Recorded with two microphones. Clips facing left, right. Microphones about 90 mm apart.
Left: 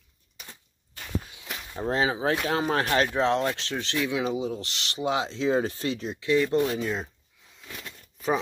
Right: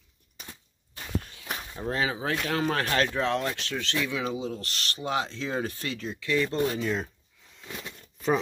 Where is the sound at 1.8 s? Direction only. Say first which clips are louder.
Left 4 dB; 25° left (ahead or behind).